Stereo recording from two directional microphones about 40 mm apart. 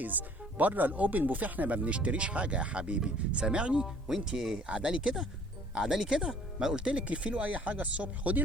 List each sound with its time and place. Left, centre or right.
0.0 s speech: right
3.0 s speech: right
3.8 s speech: centre
4.6 s speech: right
5.0 s speech: centre
7.1 s speech: right